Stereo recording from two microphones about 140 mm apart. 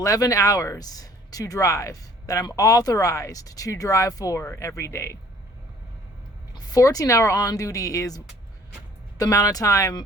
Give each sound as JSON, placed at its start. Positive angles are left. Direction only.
{"t": 0.0, "sound": "speech", "side_deg": 25}
{"t": 6.5, "sound": "speech", "side_deg": 25}